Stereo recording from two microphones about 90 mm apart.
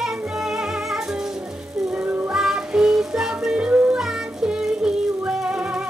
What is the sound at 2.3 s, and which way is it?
Music, 5° right (ahead or behind).